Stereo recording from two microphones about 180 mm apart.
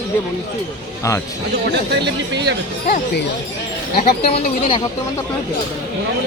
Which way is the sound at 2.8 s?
60° left (ahead or behind).